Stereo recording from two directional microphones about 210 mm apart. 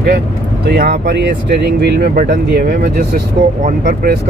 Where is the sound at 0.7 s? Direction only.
45° right (ahead or behind).